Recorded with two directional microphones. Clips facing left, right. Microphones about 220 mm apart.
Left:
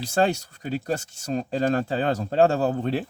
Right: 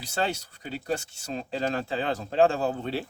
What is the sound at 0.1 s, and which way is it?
Speech, 45° left (ahead or behind).